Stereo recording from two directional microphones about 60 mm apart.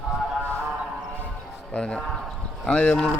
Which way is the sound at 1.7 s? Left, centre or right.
Centre.